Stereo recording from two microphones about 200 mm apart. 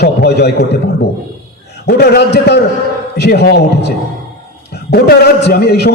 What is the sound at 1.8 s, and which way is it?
A man's voice, 55° left (ahead or behind).